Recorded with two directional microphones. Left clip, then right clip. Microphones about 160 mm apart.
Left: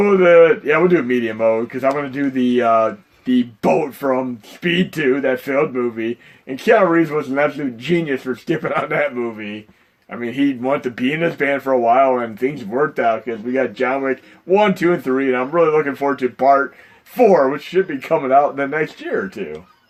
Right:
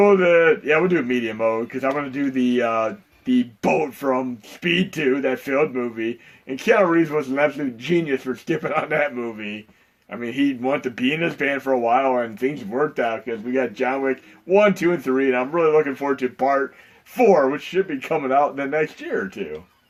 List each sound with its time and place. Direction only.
0.0 s speech: 45° left (ahead or behind)
17.8 s speech: 45° left (ahead or behind)